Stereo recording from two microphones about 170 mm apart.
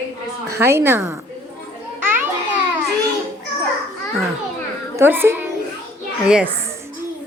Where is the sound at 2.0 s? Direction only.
10° right (ahead or behind).